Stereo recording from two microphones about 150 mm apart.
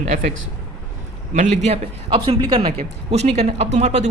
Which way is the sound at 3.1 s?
45° right (ahead or behind).